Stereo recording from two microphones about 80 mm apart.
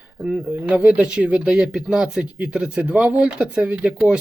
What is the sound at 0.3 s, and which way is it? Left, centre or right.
Speech, centre.